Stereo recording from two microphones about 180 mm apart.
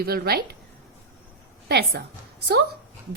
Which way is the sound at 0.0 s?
60° right (ahead or behind).